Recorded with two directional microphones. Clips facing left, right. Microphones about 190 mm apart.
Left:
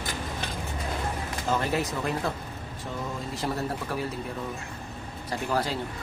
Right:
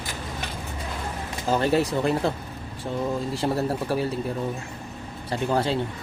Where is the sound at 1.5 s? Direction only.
30° right (ahead or behind).